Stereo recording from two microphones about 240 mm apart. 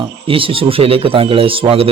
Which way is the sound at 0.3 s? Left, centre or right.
Right.